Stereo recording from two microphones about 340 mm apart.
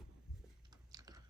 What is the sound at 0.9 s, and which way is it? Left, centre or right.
Typing, centre.